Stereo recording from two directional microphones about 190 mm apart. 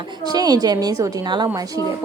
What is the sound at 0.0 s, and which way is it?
A woman's voice, 20° right (ahead or behind).